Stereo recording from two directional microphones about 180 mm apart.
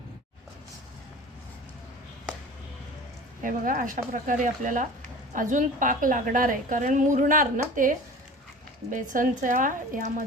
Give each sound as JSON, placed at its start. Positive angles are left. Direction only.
{"t": 3.4, "sound": "a woman's voice", "side_deg": -50}